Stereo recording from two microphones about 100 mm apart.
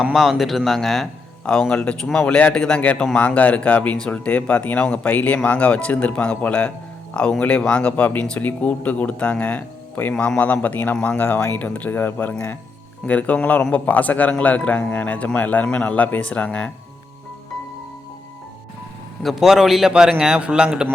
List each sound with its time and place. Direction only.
0.1 s a man's voice: centre (ahead or behind)
1.7 s speech: 10° left (ahead or behind)
19.2 s a man's voice: centre (ahead or behind)